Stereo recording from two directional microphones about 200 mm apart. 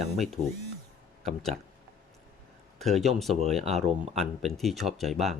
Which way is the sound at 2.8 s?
Centre (ahead or behind).